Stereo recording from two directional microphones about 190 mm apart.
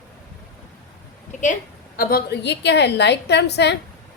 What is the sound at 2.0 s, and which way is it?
A woman's voice, 50° left (ahead or behind).